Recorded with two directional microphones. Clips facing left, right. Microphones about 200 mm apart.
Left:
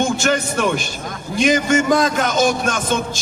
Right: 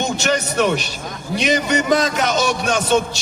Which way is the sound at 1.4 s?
50° left (ahead or behind).